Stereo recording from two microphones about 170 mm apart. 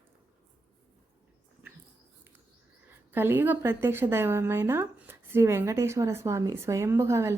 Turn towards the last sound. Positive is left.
turn(degrees=-15)  # may be behind; listen again after turning